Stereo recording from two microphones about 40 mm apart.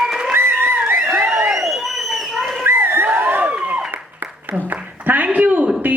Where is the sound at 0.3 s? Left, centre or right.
Right.